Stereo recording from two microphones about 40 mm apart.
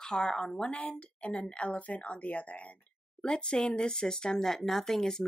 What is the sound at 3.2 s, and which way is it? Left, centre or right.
Speech, left.